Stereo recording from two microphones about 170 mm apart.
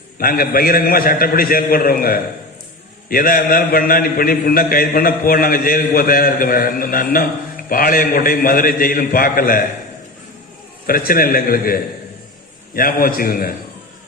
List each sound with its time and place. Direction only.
0.2 s a man's voice: 60° left (ahead or behind)
10.8 s a man's voice: 60° left (ahead or behind)